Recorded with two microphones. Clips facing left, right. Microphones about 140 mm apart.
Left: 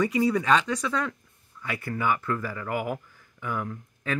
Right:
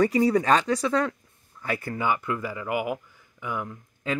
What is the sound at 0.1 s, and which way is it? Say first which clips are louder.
Speech: right 2 dB; 35° right (ahead or behind).